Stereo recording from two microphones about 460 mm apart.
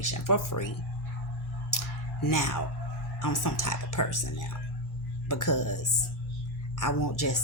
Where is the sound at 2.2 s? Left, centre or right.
Left.